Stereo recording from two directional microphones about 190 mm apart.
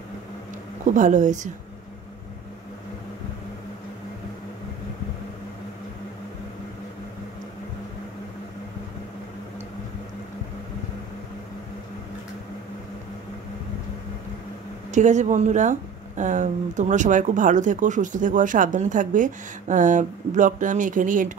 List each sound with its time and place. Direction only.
0.8 s speech: 40° right (ahead or behind)
14.9 s speech: 40° right (ahead or behind)